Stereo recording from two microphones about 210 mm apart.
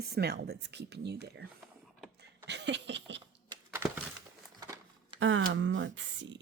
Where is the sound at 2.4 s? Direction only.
55° right (ahead or behind).